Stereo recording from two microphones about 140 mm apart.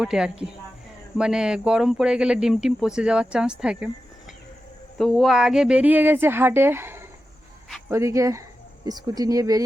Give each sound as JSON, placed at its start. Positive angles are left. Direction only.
{"t": 0.0, "sound": "speech", "side_deg": -5}
{"t": 4.9, "sound": "speech", "side_deg": 0}